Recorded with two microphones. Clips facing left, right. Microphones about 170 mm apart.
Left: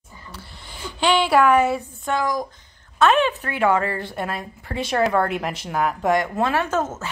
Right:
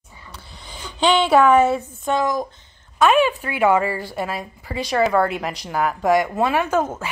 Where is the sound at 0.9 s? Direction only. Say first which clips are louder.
Right 2 dB; 20° right (ahead or behind).